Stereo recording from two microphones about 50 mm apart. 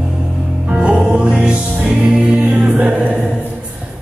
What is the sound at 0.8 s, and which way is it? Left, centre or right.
Music, centre.